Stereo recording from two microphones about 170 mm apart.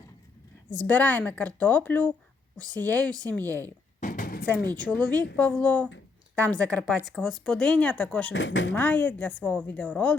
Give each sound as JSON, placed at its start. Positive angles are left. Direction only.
{"t": 0.7, "sound": "a woman's voice", "side_deg": 10}
{"t": 4.0, "sound": "a sound", "side_deg": 55}
{"t": 4.8, "sound": "a woman's voice", "side_deg": 5}
{"t": 8.3, "sound": "speech", "side_deg": 90}
{"t": 8.7, "sound": "a woman's voice", "side_deg": 10}